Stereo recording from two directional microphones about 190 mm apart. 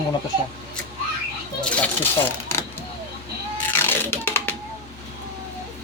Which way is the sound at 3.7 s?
10° left (ahead or behind).